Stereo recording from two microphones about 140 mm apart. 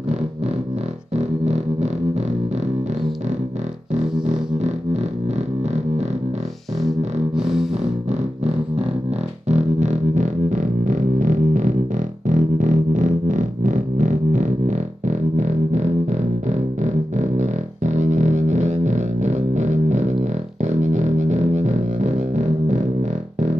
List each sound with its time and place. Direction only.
1.1 s music: 55° right (ahead or behind)
3.9 s music: 55° right (ahead or behind)
7.3 s music: 5° right (ahead or behind)
9.5 s music: 55° right (ahead or behind)